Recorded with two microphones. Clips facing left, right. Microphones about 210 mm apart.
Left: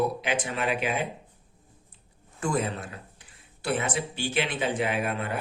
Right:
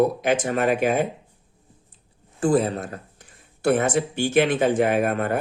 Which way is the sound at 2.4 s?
35° right (ahead or behind).